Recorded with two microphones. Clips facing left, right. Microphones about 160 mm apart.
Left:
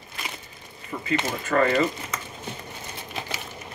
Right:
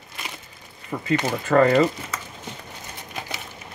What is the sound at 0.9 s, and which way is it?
Speech, 60° right (ahead or behind).